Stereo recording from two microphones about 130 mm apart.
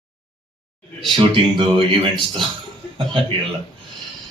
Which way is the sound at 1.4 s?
45° right (ahead or behind).